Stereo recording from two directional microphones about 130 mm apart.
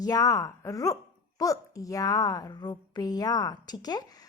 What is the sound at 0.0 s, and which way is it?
A woman's voice, 30° left (ahead or behind).